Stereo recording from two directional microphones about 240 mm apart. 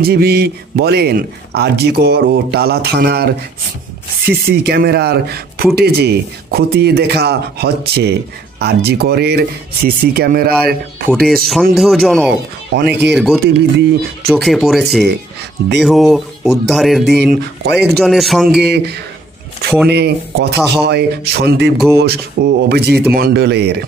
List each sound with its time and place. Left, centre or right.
0.0 s speech: right
4.3 s speech: right
11.1 s music: centre
13.4 s speech: right
14.3 s music: centre
18.6 s speech: right